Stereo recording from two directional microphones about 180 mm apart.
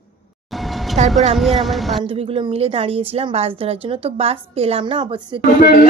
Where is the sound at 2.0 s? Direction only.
30° right (ahead or behind).